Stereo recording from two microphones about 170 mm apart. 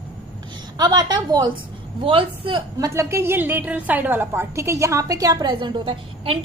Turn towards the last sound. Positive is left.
turn(degrees=-30)  # may be behind; listen again after turning